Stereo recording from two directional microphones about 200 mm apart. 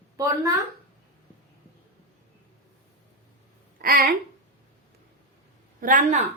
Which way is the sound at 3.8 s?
50° right (ahead or behind).